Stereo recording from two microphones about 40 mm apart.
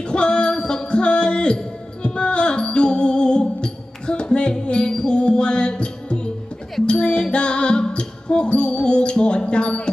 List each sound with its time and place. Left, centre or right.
0.1 s music: left